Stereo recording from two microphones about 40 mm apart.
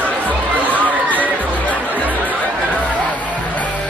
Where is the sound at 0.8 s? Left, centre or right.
Right.